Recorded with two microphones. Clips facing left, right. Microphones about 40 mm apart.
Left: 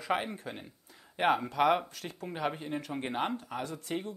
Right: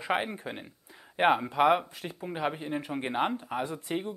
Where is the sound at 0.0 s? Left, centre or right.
Right.